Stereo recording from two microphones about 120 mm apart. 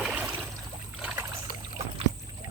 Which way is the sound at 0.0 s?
10° right (ahead or behind).